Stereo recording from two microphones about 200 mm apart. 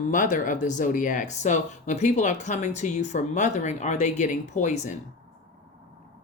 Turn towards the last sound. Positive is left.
turn(degrees=35)  # may be behind; listen again after turning